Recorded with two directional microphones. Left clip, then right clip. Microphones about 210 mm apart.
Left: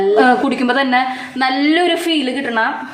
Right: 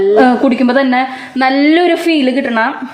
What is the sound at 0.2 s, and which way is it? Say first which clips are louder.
A woman's voice: right 3 dB; 25° right (ahead or behind).